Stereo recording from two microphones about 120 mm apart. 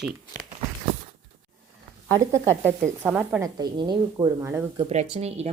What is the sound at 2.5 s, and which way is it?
Speech, 20° right (ahead or behind).